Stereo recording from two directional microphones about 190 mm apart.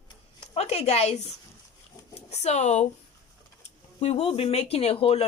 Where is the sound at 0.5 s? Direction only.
35° left (ahead or behind).